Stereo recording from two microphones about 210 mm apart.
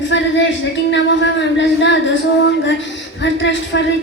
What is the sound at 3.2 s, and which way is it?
Speech, 60° left (ahead or behind).